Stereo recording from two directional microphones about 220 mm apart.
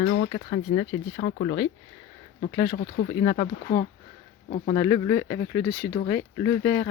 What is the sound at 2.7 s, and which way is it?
Speech, 45° left (ahead or behind).